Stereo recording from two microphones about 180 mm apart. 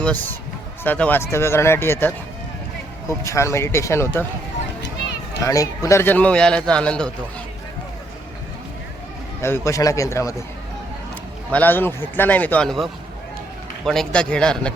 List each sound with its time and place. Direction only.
0.0 s a man's voice: 10° left (ahead or behind)
5.4 s a man's voice: 20° left (ahead or behind)
9.4 s a man's voice: 15° left (ahead or behind)
11.5 s a man's voice: 10° left (ahead or behind)